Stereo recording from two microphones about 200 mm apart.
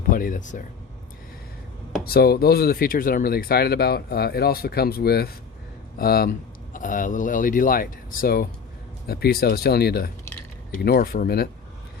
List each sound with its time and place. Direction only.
0.1 s speech: 45° left (ahead or behind)
2.0 s speech: 50° left (ahead or behind)